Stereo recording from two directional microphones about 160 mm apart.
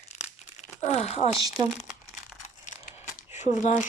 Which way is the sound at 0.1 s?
45° left (ahead or behind).